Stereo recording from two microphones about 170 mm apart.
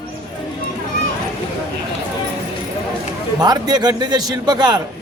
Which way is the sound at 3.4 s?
25° right (ahead or behind).